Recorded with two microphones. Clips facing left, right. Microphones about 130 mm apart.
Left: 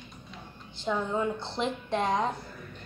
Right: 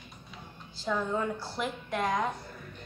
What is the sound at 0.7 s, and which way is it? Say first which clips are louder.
A woman's voice: left 1 dB; 20° left (ahead or behind).